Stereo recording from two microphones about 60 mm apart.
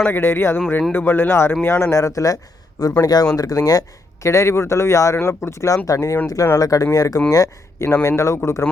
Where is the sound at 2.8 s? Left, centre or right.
Left.